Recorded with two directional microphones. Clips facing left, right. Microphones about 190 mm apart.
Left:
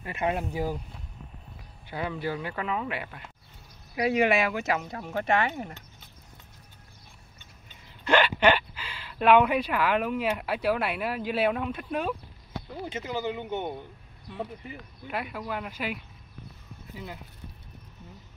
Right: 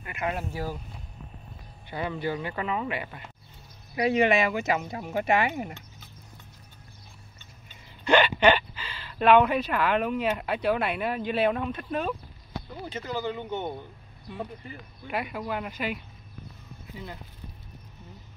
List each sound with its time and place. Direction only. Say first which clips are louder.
0.0 s speech: left 3 dB; 25° left (ahead or behind)
1.9 s speech: right 1 dB; 5° left (ahead or behind); by 5.8 s 10° right (ahead or behind)
8.0 s speech: right 2 dB; 5° left (ahead or behind)